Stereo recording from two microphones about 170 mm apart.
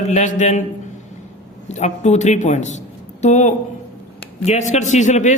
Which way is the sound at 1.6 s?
40° left (ahead or behind).